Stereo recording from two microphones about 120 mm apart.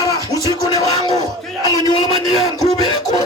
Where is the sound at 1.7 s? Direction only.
30° left (ahead or behind).